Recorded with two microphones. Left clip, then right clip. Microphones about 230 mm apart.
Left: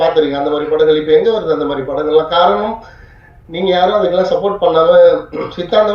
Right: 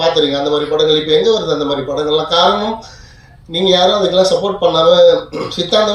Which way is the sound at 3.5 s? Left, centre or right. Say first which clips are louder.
Right 1 dB; right.